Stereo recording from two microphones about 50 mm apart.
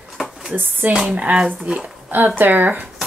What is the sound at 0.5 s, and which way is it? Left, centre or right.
Speech, right.